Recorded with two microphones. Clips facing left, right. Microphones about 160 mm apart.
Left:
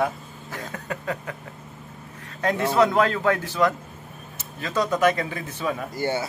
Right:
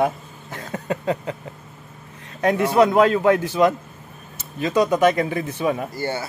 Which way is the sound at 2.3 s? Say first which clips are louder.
Right 4 dB; 15° right (ahead or behind).